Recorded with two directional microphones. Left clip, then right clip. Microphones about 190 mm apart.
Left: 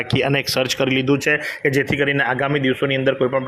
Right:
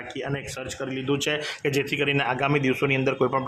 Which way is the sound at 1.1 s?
15° left (ahead or behind).